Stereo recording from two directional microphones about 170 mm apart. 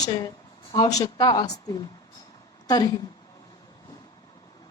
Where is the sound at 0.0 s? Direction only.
25° left (ahead or behind).